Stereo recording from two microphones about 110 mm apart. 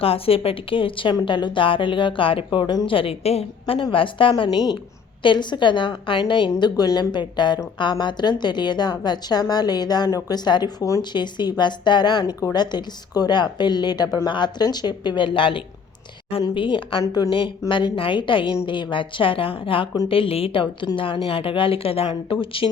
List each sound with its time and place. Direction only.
0.0 s speech: 60° left (ahead or behind)
3.8 s a woman's voice: 50° left (ahead or behind)
12.2 s a woman's voice: 30° left (ahead or behind); by 17.0 s 50° left (ahead or behind)
17.0 s a woman's voice: 40° left (ahead or behind)